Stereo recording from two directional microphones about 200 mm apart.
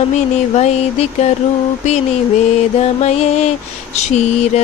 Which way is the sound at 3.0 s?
30° left (ahead or behind).